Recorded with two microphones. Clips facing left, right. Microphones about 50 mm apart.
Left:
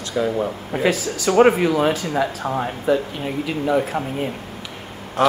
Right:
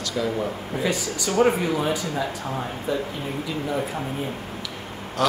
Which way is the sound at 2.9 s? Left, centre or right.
Left.